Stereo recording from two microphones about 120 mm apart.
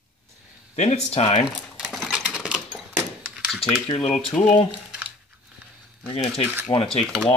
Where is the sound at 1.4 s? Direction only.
5° right (ahead or behind).